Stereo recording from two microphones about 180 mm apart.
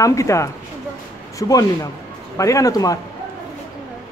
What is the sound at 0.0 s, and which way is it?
Speech, 15° left (ahead or behind).